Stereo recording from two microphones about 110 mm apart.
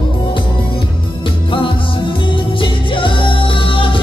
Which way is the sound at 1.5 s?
50° left (ahead or behind).